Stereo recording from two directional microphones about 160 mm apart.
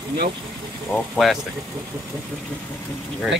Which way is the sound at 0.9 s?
Centre (ahead or behind).